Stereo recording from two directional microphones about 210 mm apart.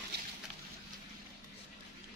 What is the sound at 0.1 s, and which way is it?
Boat, 50° right (ahead or behind).